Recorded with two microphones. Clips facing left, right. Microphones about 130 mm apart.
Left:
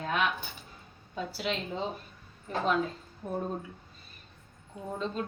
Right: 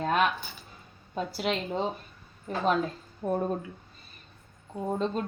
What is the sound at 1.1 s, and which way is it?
Speech, 45° right (ahead or behind).